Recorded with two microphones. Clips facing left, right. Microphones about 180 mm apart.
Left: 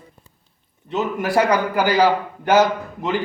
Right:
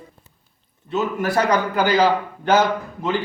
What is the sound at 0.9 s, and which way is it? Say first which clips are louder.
A man's voice: left 1 dB; 15° left (ahead or behind).